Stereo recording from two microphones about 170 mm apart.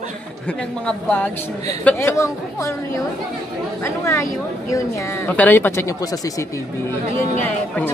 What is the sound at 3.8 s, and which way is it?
Speech, 15° left (ahead or behind).